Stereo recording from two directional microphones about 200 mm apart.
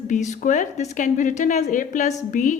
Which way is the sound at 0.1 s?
35° left (ahead or behind).